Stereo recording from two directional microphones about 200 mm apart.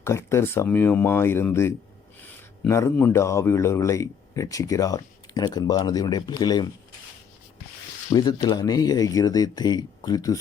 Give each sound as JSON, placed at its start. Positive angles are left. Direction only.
{"t": 0.0, "sound": "speech", "side_deg": 15}
{"t": 8.1, "sound": "speech", "side_deg": 20}